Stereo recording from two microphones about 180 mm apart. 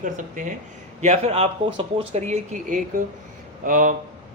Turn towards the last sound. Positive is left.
turn(degrees=-50)  # may be behind; listen again after turning